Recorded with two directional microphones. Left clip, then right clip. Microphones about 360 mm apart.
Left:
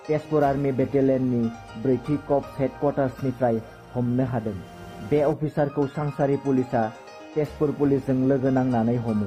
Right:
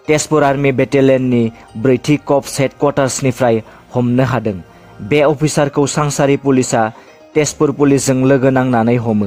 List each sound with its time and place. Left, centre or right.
0.1 s speech: right